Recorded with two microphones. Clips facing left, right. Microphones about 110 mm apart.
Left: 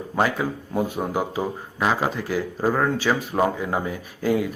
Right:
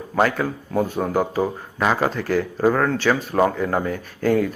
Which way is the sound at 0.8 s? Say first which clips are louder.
Right 4 dB; 10° left (ahead or behind).